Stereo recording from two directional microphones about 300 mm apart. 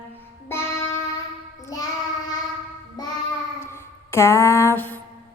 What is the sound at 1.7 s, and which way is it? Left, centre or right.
Child singing, centre.